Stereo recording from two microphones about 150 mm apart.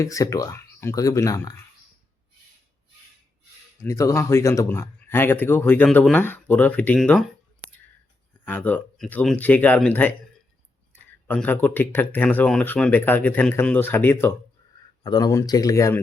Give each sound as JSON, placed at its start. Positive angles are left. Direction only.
{"t": 0.0, "sound": "speech", "side_deg": 20}
{"t": 3.8, "sound": "speech", "side_deg": 20}
{"t": 8.4, "sound": "speech", "side_deg": 10}
{"t": 15.0, "sound": "speech", "side_deg": 25}